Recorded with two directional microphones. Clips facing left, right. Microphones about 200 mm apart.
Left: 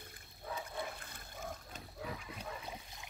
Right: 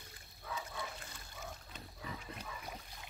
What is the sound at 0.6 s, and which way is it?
Pig, 55° left (ahead or behind).